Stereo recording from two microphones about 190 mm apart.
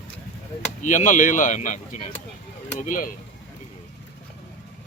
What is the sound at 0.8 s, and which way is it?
A man's voice, 40° left (ahead or behind).